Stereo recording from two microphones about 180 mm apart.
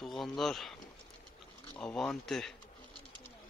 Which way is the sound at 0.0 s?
Centre (ahead or behind).